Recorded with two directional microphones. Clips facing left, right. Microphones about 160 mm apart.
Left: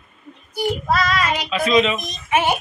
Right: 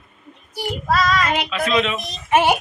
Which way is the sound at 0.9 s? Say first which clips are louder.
Right 4 dB; centre (ahead or behind).